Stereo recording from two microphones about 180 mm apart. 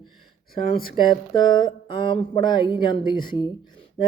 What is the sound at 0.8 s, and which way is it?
Speech, 25° left (ahead or behind).